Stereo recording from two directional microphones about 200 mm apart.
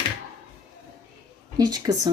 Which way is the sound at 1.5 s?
20° right (ahead or behind).